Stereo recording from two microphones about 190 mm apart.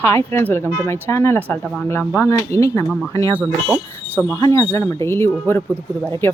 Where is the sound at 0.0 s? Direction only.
15° left (ahead or behind).